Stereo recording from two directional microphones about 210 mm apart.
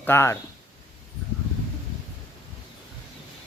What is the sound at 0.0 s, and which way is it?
Speech, 10° left (ahead or behind).